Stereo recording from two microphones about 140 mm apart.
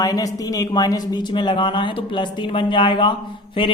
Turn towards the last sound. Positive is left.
turn(degrees=35)  # may be behind; listen again after turning